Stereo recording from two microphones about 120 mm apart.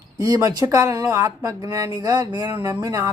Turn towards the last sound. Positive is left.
turn(degrees=-25)  # may be behind; listen again after turning